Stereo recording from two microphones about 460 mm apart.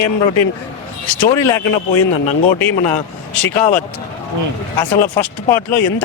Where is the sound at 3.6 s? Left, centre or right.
Centre.